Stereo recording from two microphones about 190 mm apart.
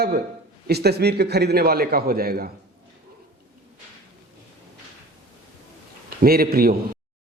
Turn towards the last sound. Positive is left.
turn(degrees=-50)  # may be behind; listen again after turning